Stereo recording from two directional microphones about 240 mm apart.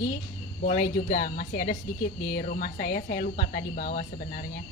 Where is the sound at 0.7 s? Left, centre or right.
Left.